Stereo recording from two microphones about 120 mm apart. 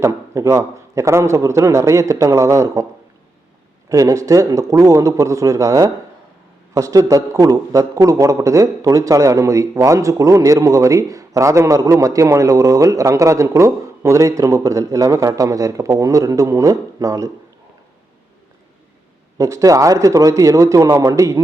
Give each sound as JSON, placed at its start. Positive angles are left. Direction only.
{"t": 0.0, "sound": "a man's voice", "side_deg": -25}
{"t": 3.8, "sound": "a man's voice", "side_deg": -25}
{"t": 19.4, "sound": "a man's voice", "side_deg": -25}